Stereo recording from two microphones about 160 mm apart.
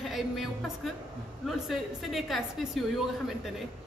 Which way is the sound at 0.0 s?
Centre (ahead or behind).